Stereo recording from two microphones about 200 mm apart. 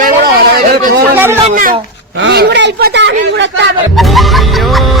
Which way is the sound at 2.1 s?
60° right (ahead or behind).